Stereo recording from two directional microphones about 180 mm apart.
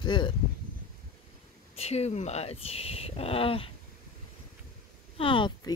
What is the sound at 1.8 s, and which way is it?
Speech, 35° left (ahead or behind).